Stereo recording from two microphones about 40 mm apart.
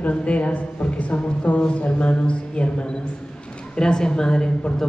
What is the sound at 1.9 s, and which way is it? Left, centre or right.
Speech, left.